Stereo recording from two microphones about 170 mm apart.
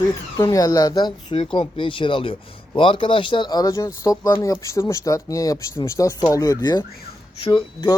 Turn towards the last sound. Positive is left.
turn(degrees=25)  # may be behind; listen again after turning